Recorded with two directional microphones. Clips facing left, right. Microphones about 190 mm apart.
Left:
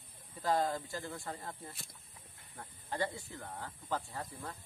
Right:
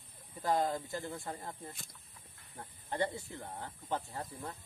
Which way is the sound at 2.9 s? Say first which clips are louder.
Right 2 dB; 20° right (ahead or behind).